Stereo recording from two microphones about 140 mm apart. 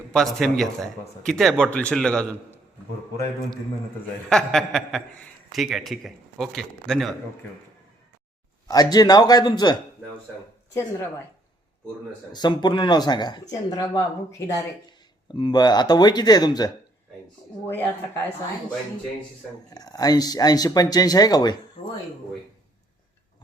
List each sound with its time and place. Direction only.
0.1 s speech: 5° left (ahead or behind)
4.3 s speech: 5° left (ahead or behind)
8.6 s speech: 30° left (ahead or behind)
12.3 s speech: 30° left (ahead or behind)
17.7 s speech: 15° left (ahead or behind)
19.7 s speech: 25° left (ahead or behind)